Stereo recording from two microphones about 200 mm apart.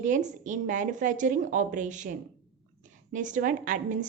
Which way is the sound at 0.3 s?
40° right (ahead or behind).